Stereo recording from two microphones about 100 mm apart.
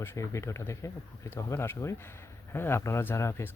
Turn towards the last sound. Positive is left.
turn(degrees=25)  # may be behind; listen again after turning